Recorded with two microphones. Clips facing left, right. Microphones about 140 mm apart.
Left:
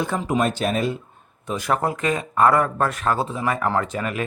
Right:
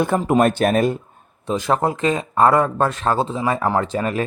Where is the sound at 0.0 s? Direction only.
55° right (ahead or behind).